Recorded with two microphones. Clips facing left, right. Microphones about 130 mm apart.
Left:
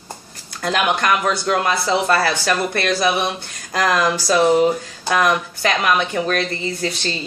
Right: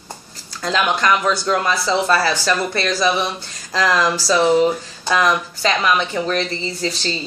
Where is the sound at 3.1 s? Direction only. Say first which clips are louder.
Even; 55° left (ahead or behind).